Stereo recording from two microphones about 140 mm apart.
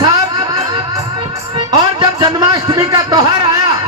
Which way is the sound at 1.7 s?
30° right (ahead or behind).